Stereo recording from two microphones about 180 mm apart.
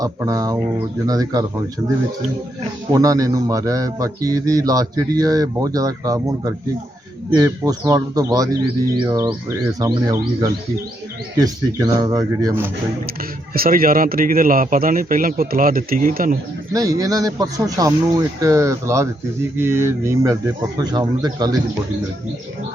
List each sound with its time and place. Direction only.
0.0 s a man's voice: 20° right (ahead or behind)
2.9 s a man's voice: 20° right (ahead or behind)
13.5 s a man's voice: 55° right (ahead or behind)
16.7 s a man's voice: 20° right (ahead or behind)